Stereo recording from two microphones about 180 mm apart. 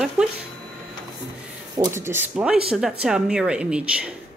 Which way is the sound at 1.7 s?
15° right (ahead or behind).